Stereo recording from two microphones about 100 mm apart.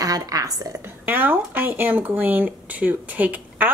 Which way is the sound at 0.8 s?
20° right (ahead or behind).